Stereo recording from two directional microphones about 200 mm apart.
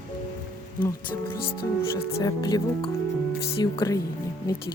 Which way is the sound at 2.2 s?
20° left (ahead or behind).